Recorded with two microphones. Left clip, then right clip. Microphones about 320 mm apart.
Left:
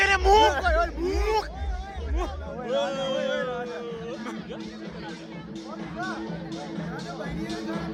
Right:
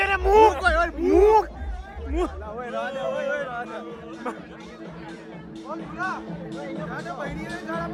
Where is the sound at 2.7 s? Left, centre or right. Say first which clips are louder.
Left 2 dB; left.